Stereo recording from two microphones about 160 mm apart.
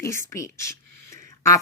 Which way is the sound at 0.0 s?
20° left (ahead or behind).